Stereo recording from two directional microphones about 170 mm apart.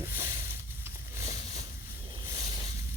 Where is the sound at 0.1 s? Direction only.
55° left (ahead or behind).